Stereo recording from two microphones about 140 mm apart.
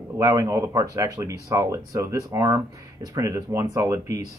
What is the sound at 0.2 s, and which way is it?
Speech, 20° right (ahead or behind).